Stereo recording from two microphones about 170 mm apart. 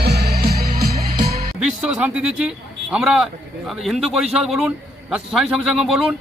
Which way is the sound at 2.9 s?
5° right (ahead or behind).